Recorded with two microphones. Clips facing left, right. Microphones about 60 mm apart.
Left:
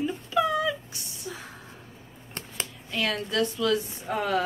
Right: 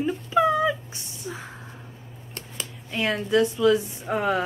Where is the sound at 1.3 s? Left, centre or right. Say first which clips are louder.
Right 3 dB; right.